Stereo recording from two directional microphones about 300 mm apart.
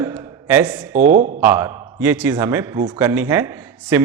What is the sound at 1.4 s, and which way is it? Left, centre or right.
A man's voice, centre.